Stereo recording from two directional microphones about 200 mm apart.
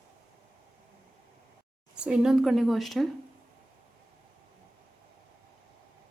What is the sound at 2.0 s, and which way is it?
A woman's voice, 5° right (ahead or behind).